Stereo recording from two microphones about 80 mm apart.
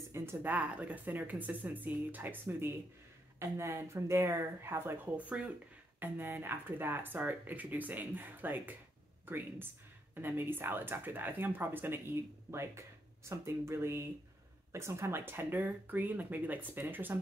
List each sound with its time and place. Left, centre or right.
0.1 s speech: right
0.5 s speech: centre
5.1 s speech: centre